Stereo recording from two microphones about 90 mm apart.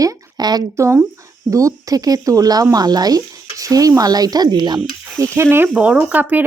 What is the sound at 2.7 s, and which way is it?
Stir, 45° right (ahead or behind).